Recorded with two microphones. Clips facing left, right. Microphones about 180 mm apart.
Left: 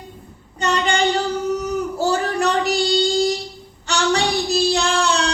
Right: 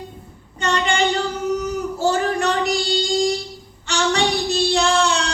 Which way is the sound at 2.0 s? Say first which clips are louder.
Right 1 dB; 35° left (ahead or behind).